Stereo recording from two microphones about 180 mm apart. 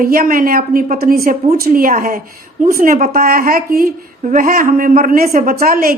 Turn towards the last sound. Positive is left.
turn(degrees=-50)  # may be behind; listen again after turning